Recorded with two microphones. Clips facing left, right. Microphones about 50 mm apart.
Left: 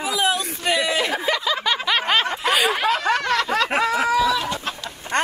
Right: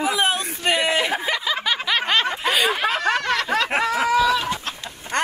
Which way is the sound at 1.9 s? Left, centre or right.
Centre.